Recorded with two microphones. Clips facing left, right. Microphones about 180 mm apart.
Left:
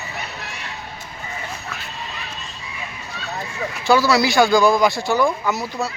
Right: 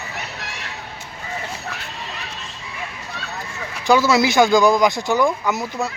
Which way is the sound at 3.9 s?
20° right (ahead or behind).